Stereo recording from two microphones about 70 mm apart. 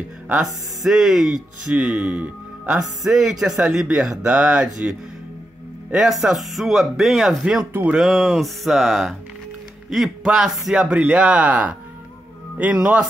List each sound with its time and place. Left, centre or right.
0.4 s speech: centre